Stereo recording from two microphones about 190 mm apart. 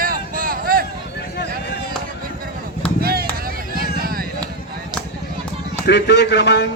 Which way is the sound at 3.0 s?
55° right (ahead or behind).